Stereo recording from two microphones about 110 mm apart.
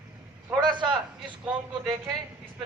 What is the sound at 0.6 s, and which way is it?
Speech, 45° right (ahead or behind).